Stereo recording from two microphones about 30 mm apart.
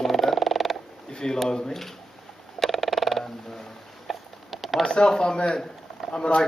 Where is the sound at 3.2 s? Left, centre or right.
Centre.